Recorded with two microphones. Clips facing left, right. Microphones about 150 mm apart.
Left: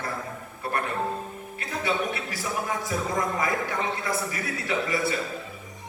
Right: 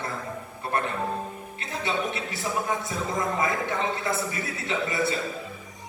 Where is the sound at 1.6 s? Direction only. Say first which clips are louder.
Left 1 dB; 25° right (ahead or behind).